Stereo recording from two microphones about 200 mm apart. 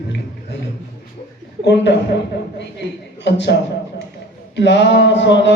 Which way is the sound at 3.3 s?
60° left (ahead or behind).